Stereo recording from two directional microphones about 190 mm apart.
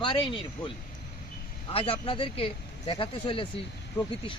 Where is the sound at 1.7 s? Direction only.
30° left (ahead or behind).